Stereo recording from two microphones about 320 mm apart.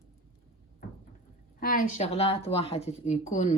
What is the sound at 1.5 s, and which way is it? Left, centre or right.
Speech, left.